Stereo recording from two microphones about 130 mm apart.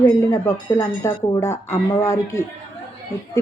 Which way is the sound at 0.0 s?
25° left (ahead or behind).